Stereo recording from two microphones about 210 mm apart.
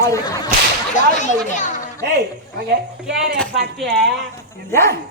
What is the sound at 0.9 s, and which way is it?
Speech, 35° left (ahead or behind).